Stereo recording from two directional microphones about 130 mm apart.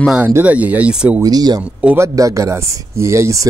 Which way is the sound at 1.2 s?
30° right (ahead or behind).